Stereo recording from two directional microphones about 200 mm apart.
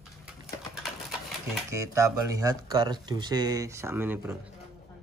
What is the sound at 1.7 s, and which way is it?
Speech, 15° right (ahead or behind).